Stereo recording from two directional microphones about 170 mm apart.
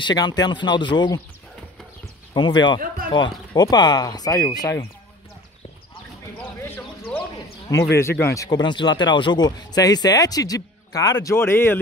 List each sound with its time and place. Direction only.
0.0 s speech: 25° left (ahead or behind)
2.3 s speech: 25° left (ahead or behind)
8.0 s speech: 15° left (ahead or behind)